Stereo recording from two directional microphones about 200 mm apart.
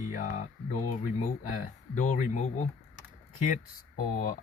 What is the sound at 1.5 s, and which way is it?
Speech, 40° left (ahead or behind).